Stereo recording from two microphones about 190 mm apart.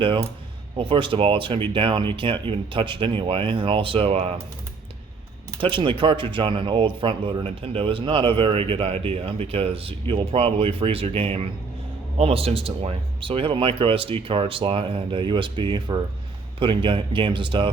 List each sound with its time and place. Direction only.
0.0 s speech: 25° right (ahead or behind)
5.5 s speech: 25° right (ahead or behind)